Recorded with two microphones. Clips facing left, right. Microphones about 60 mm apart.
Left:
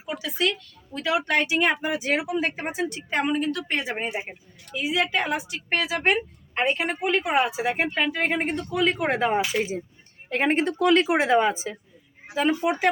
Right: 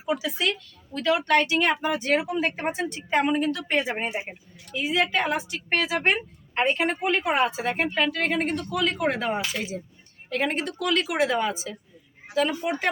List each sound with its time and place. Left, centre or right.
0.0 s speech: centre; by 12.5 s left
12.5 s speech: centre